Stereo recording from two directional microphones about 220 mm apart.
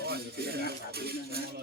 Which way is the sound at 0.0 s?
45° right (ahead or behind).